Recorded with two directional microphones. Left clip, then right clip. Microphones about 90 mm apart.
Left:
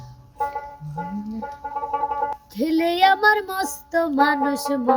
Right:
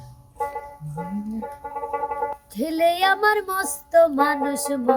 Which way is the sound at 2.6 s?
20° right (ahead or behind).